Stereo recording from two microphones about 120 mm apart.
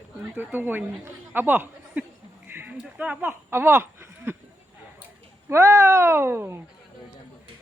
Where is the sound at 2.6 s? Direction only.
15° right (ahead or behind).